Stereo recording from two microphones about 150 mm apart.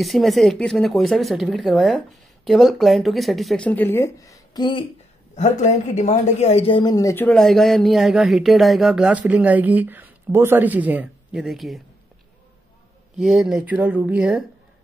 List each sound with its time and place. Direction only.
0.0 s speech: centre (ahead or behind); by 4.8 s 30° left (ahead or behind)
5.3 s speech: 50° left (ahead or behind); by 7.2 s 25° left (ahead or behind)
7.2 s speech: 5° left (ahead or behind)
13.2 s speech: centre (ahead or behind)